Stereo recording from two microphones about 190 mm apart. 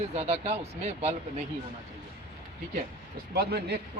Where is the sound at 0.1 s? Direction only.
35° right (ahead or behind).